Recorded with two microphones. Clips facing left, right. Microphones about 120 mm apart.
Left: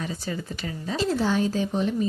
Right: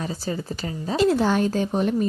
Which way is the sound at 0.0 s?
35° right (ahead or behind).